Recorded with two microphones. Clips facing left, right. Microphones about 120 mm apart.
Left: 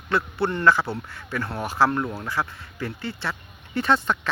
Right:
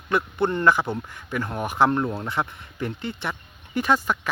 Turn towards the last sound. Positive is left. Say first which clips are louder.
# even
turn(degrees=-10)  # may be behind; listen again after turning